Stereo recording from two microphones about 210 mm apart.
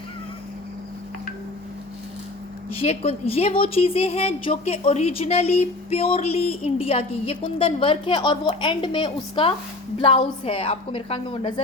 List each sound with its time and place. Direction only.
2.7 s a woman's voice: 30° left (ahead or behind)